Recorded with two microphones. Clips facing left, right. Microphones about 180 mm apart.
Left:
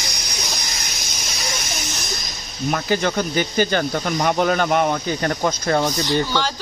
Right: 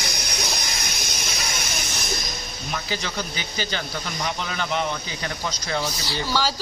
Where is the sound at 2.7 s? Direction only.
55° left (ahead or behind).